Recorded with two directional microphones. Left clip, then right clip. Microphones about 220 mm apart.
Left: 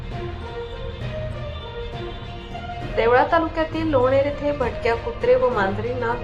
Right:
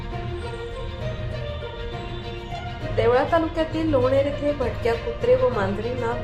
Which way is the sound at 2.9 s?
15° left (ahead or behind).